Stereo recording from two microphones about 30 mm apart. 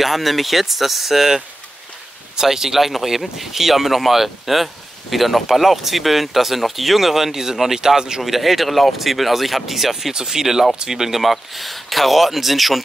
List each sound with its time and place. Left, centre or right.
0.0 s speech: centre
2.4 s speech: centre
7.8 s a man's voice: right
8.2 s speech: centre
10.1 s speech: centre
11.2 s speech: centre